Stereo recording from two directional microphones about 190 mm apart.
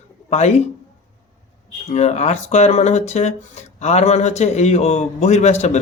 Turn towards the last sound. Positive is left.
turn(degrees=35)  # may be behind; listen again after turning